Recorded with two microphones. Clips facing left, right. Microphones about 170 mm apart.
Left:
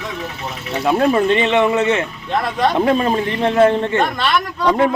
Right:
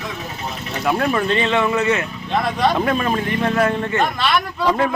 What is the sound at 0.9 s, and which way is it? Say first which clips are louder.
A man's voice: left 4 dB; 25° left (ahead or behind).